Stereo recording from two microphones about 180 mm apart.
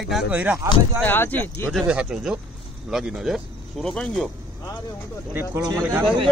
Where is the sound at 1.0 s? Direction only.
10° left (ahead or behind).